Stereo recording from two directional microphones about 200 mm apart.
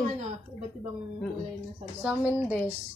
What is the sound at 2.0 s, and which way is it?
Speech, 5° right (ahead or behind).